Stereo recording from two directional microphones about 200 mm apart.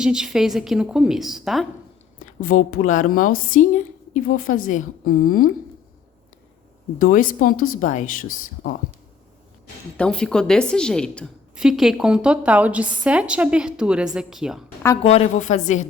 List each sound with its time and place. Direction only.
0.0 s a woman's voice: 5° right (ahead or behind)
2.2 s a woman's voice: 45° left (ahead or behind)
7.0 s speech: 45° left (ahead or behind)
10.0 s a woman's voice: 5° left (ahead or behind)
15.0 s a woman's voice: 30° left (ahead or behind)